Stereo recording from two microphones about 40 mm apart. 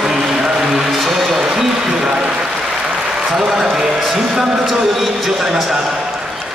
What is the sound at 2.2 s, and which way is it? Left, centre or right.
Applause, centre.